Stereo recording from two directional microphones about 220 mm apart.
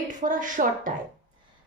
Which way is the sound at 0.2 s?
35° right (ahead or behind).